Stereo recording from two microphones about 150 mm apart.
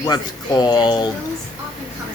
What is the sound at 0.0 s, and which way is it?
Speech, 25° left (ahead or behind).